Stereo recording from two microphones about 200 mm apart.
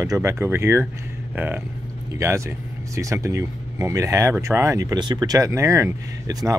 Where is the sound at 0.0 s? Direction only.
15° right (ahead or behind).